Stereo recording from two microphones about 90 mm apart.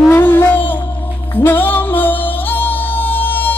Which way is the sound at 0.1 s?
25° left (ahead or behind).